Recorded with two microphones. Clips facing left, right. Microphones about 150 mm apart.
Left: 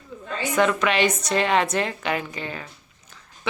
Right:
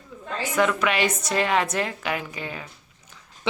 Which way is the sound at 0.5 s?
5° right (ahead or behind).